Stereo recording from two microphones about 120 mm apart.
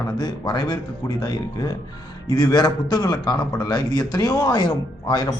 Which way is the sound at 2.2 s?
35° left (ahead or behind).